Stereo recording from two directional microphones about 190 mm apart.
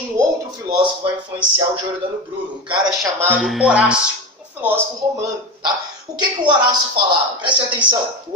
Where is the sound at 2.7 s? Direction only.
15° right (ahead or behind).